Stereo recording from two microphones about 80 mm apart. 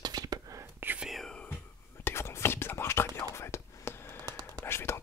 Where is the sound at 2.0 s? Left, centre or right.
Left.